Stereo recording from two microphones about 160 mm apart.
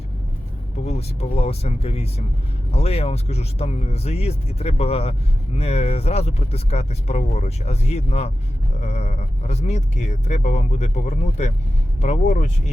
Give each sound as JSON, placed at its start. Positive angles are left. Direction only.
{"t": 0.9, "sound": "speech", "side_deg": 40}